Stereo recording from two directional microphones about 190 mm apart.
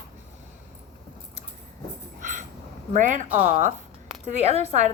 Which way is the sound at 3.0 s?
40° right (ahead or behind).